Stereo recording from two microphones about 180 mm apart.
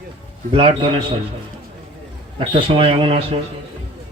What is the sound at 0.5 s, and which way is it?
Speech, 30° right (ahead or behind).